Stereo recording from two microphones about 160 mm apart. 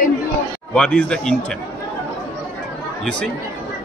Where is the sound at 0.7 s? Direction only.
5° left (ahead or behind).